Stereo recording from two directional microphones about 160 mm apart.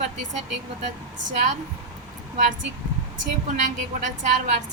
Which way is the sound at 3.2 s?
50° right (ahead or behind).